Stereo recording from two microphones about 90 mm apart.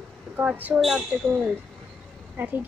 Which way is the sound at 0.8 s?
5° right (ahead or behind).